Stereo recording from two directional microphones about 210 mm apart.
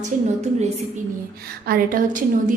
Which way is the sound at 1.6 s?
45° right (ahead or behind).